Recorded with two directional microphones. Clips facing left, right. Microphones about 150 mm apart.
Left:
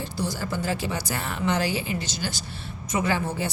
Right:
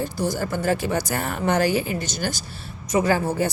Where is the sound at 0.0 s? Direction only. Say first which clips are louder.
Right 5 dB; 45° right (ahead or behind).